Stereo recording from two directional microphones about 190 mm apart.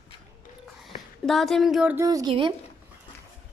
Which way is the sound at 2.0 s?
20° right (ahead or behind).